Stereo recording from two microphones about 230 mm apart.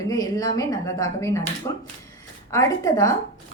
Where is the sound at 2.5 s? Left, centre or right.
Centre.